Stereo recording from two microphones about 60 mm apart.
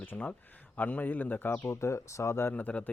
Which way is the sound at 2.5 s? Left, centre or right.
Left.